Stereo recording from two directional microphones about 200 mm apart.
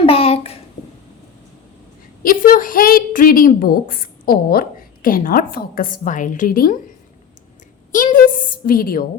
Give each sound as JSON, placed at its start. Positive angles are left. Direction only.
{"t": 0.0, "sound": "a sound", "side_deg": 30}
{"t": 2.2, "sound": "a woman's voice", "side_deg": 45}
{"t": 7.9, "sound": "a woman's voice", "side_deg": 40}